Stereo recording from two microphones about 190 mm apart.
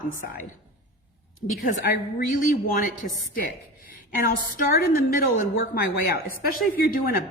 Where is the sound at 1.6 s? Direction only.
50° left (ahead or behind).